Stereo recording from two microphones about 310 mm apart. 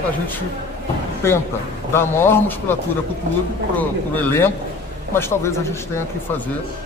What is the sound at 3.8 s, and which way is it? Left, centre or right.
Speech, centre.